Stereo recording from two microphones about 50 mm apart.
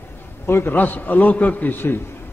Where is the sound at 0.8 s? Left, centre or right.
Left.